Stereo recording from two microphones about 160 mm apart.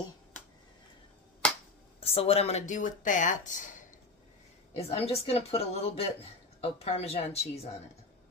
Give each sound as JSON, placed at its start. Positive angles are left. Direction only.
{"t": 2.0, "sound": "speech", "side_deg": 40}
{"t": 4.7, "sound": "speech", "side_deg": 40}